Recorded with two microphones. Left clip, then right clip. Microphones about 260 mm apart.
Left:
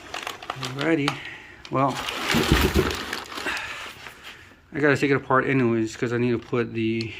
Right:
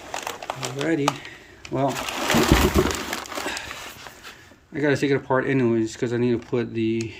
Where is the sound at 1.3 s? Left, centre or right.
Centre.